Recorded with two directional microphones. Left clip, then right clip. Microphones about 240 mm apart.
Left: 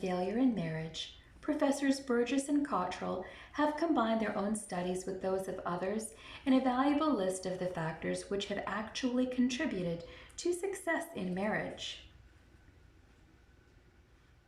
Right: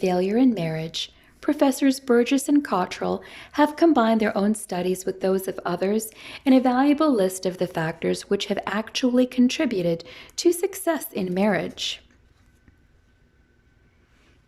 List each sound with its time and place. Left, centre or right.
0.0 s speech: right